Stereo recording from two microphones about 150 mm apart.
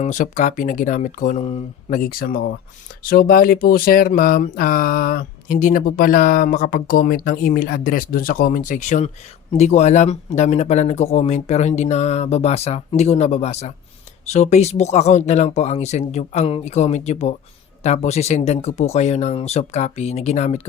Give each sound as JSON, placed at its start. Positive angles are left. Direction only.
{"t": 0.0, "sound": "speech", "side_deg": 55}
{"t": 1.9, "sound": "speech", "side_deg": 75}
{"t": 3.0, "sound": "a sound", "side_deg": 75}
{"t": 9.5, "sound": "speech", "side_deg": 50}